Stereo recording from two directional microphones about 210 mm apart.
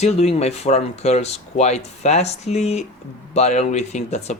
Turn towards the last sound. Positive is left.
turn(degrees=35)  # may be behind; listen again after turning